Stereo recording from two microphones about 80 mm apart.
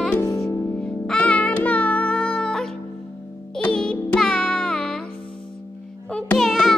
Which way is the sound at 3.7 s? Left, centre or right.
Centre.